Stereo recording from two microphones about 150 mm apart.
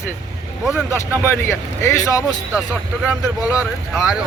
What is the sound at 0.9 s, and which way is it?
Speech, 15° left (ahead or behind).